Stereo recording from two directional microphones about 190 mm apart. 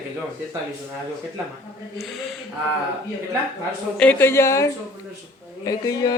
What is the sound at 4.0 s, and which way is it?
Speech, 10° left (ahead or behind).